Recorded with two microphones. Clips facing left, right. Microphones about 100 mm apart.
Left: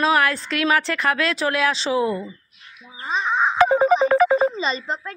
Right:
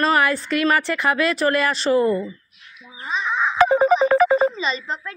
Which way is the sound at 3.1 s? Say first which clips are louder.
Left 2 dB; 30° left (ahead or behind).